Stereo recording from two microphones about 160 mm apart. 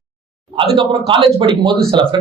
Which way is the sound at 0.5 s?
30° right (ahead or behind).